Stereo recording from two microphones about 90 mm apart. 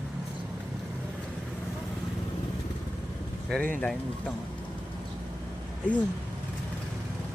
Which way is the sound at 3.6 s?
15° left (ahead or behind).